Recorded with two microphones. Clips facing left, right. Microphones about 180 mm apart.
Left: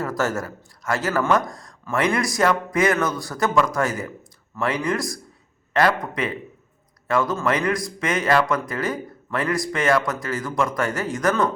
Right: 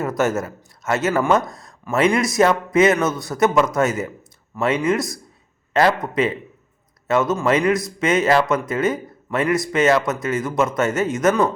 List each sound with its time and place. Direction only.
0.0 s speech: 20° right (ahead or behind)